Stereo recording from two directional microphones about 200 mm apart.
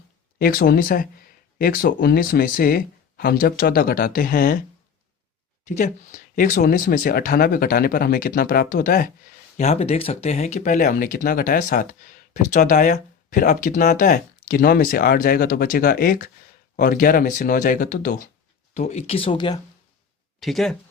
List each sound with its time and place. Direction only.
0.3 s speech: 50° left (ahead or behind)
5.6 s speech: 35° left (ahead or behind)
9.6 s speech: 35° left (ahead or behind)
20.4 s speech: centre (ahead or behind)